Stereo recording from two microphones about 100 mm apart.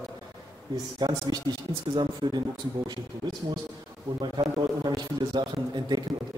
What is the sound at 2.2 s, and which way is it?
Speech, 65° right (ahead or behind).